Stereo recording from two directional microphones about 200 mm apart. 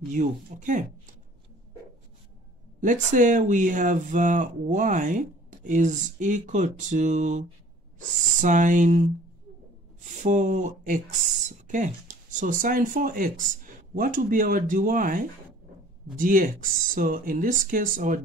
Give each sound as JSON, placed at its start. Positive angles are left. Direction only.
{"t": 0.1, "sound": "speech", "side_deg": -40}
{"t": 2.8, "sound": "speech", "side_deg": -40}
{"t": 10.0, "sound": "speech", "side_deg": -35}